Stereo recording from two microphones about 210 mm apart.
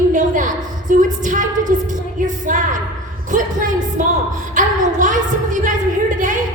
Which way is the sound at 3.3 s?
35° right (ahead or behind).